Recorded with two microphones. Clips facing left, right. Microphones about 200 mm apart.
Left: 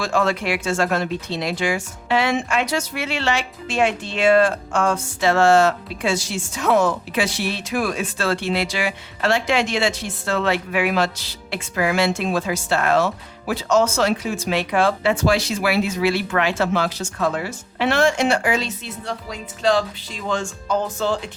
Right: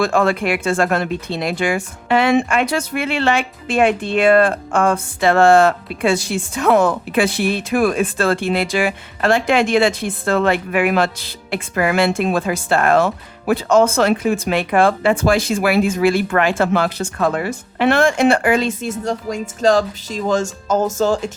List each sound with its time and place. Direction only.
0.0 s speech: 55° right (ahead or behind)